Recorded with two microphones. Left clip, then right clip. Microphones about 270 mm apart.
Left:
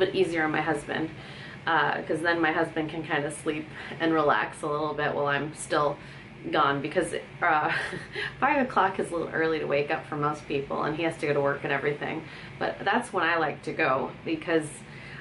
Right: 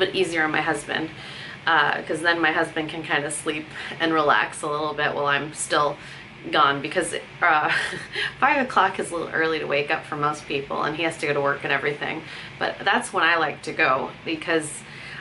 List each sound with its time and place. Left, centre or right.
0.0 s speech: centre
4.6 s speech: left
5.2 s speech: centre